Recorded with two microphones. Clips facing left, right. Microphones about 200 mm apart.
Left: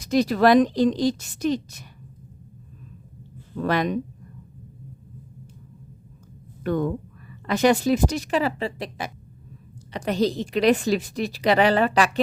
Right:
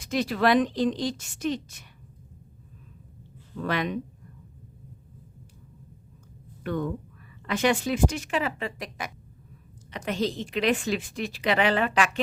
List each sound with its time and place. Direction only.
0.0 s a woman's voice: 40° left (ahead or behind)
3.6 s speech: 40° left (ahead or behind)
6.6 s a woman's voice: 40° left (ahead or behind)